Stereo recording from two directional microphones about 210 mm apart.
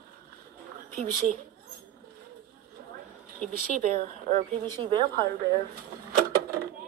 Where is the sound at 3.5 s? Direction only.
40° right (ahead or behind).